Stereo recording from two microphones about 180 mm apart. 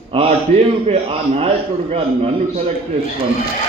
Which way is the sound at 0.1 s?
30° right (ahead or behind).